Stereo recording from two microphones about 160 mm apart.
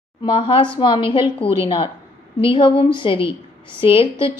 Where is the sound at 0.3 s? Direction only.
35° left (ahead or behind).